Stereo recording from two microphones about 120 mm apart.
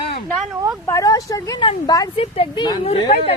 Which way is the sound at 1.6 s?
40° left (ahead or behind).